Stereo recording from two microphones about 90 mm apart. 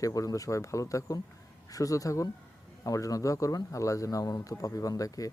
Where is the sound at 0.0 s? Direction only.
40° left (ahead or behind).